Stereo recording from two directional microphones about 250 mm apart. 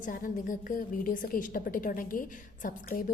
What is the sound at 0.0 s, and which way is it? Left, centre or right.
A woman's voice, left.